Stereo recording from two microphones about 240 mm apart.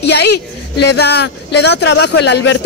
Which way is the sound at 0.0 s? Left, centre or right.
Left.